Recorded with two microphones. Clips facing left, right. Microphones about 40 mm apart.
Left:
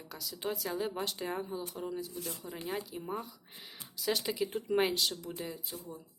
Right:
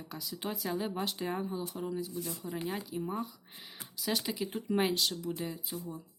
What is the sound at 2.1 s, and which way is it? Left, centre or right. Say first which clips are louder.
Speech: right 2 dB; left.